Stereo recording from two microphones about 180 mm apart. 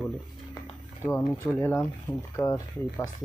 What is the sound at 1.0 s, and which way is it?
Speech, 15° left (ahead or behind).